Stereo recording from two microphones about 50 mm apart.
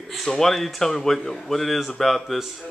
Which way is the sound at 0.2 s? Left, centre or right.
Centre.